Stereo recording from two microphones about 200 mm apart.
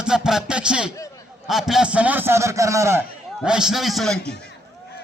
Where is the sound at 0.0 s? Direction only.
5° right (ahead or behind).